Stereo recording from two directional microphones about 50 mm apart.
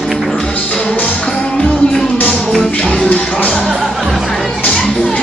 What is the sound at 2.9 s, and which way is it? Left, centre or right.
Music, left.